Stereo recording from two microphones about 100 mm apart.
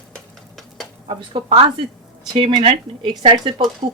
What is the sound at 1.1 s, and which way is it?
Speech, 60° right (ahead or behind).